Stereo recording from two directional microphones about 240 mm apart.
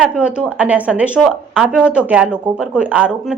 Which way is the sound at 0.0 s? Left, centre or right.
Centre.